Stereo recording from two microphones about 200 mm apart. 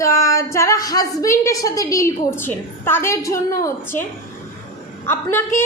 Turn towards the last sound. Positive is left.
turn(degrees=10)  # may be behind; listen again after turning